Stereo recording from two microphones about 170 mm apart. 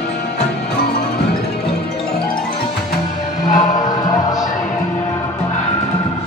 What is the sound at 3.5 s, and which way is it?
Music, 25° left (ahead or behind).